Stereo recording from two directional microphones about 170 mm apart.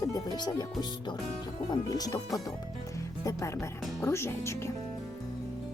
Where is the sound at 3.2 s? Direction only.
20° left (ahead or behind).